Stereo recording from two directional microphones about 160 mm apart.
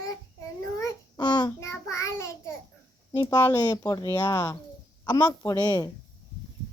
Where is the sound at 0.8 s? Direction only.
20° left (ahead or behind).